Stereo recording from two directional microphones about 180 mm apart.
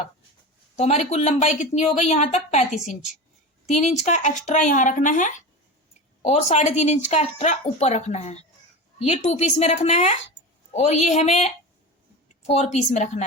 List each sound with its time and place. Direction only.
0.8 s speech: 35° left (ahead or behind)
3.7 s speech: 40° left (ahead or behind)
12.4 s a sound: 35° left (ahead or behind)
12.7 s speech: 40° left (ahead or behind)